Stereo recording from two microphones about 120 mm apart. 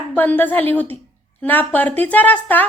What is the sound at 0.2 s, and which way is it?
A woman's voice, 15° left (ahead or behind).